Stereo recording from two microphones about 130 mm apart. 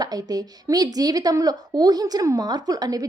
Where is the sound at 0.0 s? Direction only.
30° right (ahead or behind).